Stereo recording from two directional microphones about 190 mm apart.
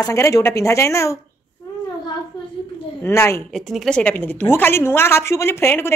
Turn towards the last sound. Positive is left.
turn(degrees=15)  # may be behind; listen again after turning